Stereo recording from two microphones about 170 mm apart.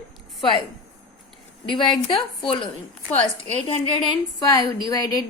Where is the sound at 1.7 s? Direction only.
30° left (ahead or behind).